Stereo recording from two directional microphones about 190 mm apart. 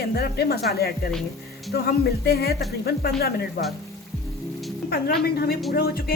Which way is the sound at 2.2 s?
55° left (ahead or behind).